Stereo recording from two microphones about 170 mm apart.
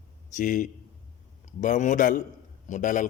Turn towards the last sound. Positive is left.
turn(degrees=50)  # may be behind; listen again after turning